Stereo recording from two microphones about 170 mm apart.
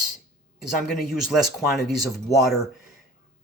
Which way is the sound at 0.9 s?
Centre (ahead or behind).